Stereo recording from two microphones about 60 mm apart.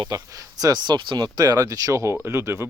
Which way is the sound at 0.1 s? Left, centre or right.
Right.